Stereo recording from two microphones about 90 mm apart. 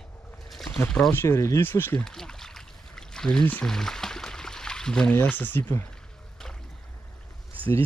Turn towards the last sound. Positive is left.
turn(degrees=-20)  # may be behind; listen again after turning